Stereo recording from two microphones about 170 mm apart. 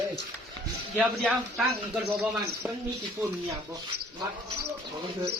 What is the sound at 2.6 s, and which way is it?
Speech, 15° right (ahead or behind).